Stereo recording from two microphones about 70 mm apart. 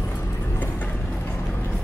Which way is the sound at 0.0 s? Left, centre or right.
Left.